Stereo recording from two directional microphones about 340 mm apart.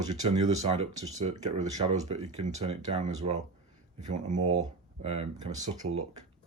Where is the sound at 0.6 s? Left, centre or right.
Centre.